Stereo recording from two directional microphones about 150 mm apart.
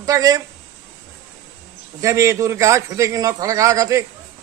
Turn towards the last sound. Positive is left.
turn(degrees=-20)  # may be behind; listen again after turning